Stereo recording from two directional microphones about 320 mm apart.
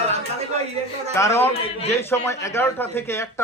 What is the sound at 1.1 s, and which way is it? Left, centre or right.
A man's voice, centre.